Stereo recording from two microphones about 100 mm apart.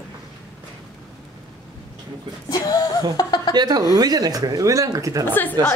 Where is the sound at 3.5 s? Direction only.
45° right (ahead or behind).